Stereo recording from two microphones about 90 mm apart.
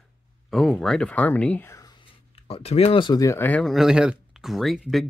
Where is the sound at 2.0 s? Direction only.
90° left.